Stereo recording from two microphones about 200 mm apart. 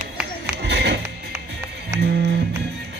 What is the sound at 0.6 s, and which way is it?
Music, 55° right (ahead or behind).